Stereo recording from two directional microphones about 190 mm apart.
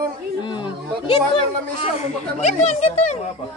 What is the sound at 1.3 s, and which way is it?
Speech, 35° left (ahead or behind).